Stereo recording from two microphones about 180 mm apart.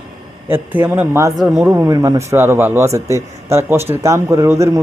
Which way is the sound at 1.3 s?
Centre (ahead or behind).